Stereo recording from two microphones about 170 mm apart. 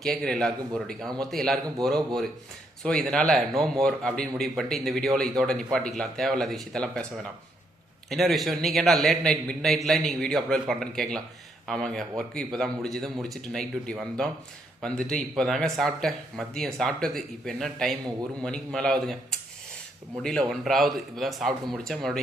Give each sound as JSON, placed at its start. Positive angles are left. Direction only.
{"t": 0.0, "sound": "speech", "side_deg": 5}
{"t": 8.1, "sound": "speech", "side_deg": 0}